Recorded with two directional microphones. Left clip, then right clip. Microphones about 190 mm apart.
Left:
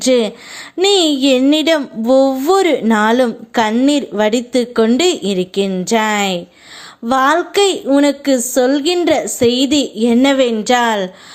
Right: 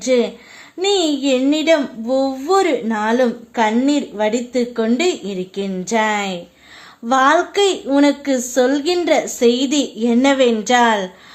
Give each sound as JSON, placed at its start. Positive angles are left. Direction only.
{"t": 0.0, "sound": "a woman's voice", "side_deg": 35}